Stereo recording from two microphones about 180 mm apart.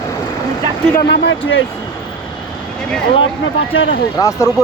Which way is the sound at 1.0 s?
75° left (ahead or behind).